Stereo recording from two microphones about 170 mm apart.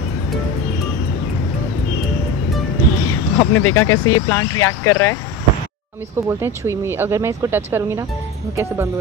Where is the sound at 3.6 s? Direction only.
15° left (ahead or behind).